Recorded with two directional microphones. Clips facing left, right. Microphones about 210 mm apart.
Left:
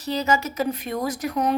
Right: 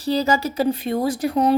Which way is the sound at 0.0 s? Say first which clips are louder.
Right 4 dB; 35° right (ahead or behind).